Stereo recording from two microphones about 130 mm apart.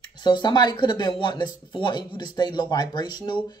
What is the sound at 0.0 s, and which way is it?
Speech, 35° left (ahead or behind).